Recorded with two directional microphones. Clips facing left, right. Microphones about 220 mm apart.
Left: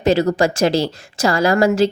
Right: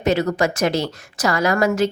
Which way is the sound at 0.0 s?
30° left (ahead or behind).